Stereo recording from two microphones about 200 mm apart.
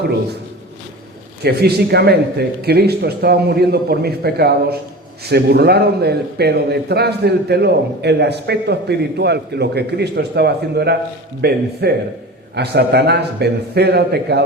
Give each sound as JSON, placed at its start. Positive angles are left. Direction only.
{"t": 1.4, "sound": "a man's voice", "side_deg": -55}